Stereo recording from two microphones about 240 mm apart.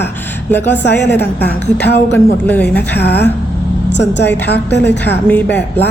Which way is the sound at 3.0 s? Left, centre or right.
Left.